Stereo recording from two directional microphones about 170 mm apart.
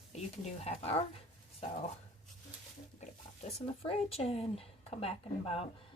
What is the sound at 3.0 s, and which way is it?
A woman's voice, 40° left (ahead or behind).